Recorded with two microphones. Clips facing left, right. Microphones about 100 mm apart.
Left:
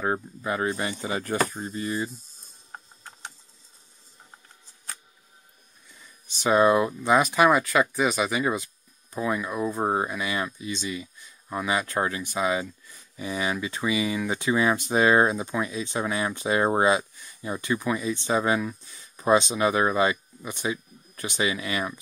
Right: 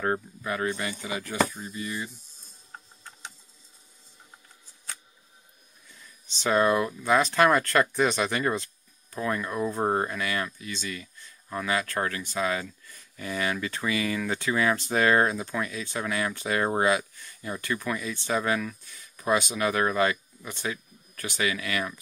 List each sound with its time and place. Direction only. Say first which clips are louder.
0.4 s speech: left 2 dB; 25° left (ahead or behind)
6.3 s speech: left 3 dB; 15° left (ahead or behind)